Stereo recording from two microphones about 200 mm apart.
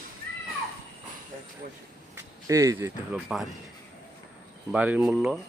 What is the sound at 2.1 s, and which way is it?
Speech, 15° right (ahead or behind).